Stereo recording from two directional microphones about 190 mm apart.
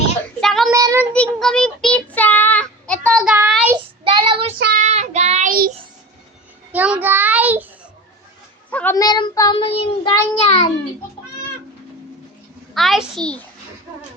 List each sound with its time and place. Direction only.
0.3 s child singing: centre (ahead or behind)
0.7 s child singing: 15° right (ahead or behind)
1.1 s child singing: 5° left (ahead or behind)
4.0 s child singing: 25° right (ahead or behind)
4.5 s child singing: 50° right (ahead or behind)
4.8 s child singing: 35° right (ahead or behind)
6.7 s child singing: 5° right (ahead or behind)
8.7 s child singing: 10° left (ahead or behind); by 10.2 s 30° left (ahead or behind)
10.4 s a child's voice: 35° left (ahead or behind)
12.7 s a child's voice: centre (ahead or behind)